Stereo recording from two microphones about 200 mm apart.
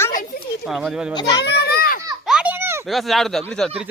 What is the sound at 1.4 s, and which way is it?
Children playing, 55° left (ahead or behind).